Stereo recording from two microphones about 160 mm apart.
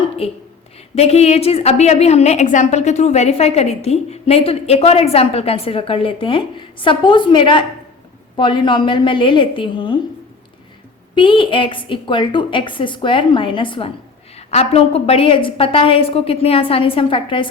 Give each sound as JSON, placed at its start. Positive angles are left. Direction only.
{"t": 0.9, "sound": "a woman's voice", "side_deg": 40}
{"t": 11.1, "sound": "a woman's voice", "side_deg": 30}